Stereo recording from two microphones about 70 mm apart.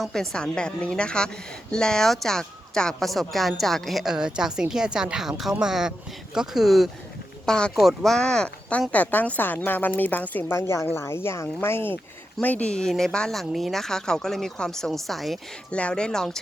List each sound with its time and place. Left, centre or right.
0.0 s a woman's voice: centre
7.4 s a woman's voice: centre
8.9 s speech: left
10.6 s speech: left
12.4 s a woman's voice: left; by 15.4 s centre
15.7 s a woman's voice: centre